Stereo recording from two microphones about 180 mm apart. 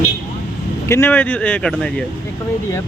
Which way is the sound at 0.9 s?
10° left (ahead or behind).